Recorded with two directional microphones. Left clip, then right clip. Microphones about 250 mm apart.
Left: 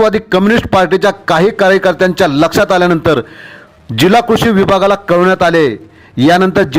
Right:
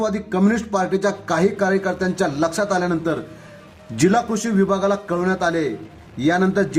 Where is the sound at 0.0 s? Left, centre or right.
Left.